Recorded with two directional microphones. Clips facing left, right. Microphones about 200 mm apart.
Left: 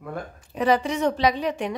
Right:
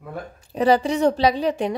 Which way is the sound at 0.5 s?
35° right (ahead or behind).